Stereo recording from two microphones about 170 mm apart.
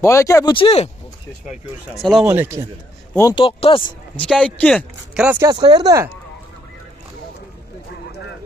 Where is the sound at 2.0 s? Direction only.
Centre (ahead or behind).